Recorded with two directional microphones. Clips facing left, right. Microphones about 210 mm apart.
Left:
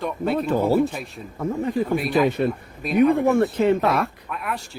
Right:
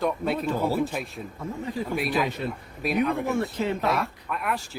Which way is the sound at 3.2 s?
55° left (ahead or behind).